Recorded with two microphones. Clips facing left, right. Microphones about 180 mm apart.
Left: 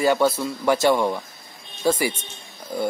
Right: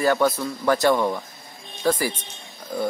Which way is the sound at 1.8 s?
25° left (ahead or behind).